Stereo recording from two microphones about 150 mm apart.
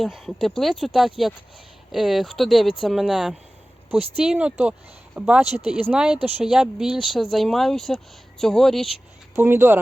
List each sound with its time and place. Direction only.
0.0 s speech: centre (ahead or behind)
6.1 s speech: 45° right (ahead or behind)
6.4 s speech: 5° right (ahead or behind)
9.3 s speech: 15° right (ahead or behind)